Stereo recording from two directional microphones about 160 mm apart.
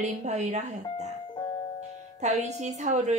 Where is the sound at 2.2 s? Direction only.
45° right (ahead or behind).